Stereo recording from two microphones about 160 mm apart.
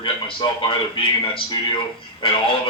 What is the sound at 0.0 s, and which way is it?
A man's voice, 30° left (ahead or behind).